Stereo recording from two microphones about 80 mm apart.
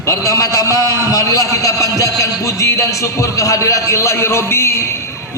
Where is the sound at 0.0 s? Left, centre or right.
Left.